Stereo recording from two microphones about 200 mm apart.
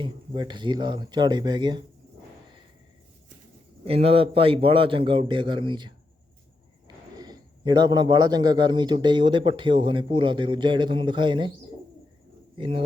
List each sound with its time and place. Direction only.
0.0 s a man's voice: 25° right (ahead or behind)
3.8 s a man's voice: 30° right (ahead or behind)
12.5 s speech: 25° right (ahead or behind)